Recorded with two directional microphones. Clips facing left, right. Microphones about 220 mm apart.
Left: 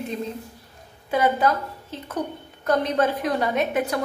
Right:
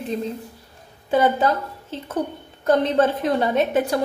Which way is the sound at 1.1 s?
25° right (ahead or behind).